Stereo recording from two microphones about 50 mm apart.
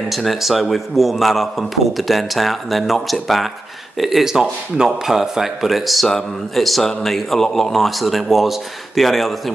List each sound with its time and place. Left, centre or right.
0.1 s a man's voice: centre